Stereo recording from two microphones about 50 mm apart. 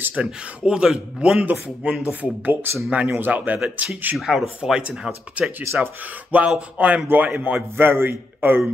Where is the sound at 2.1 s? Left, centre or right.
Right.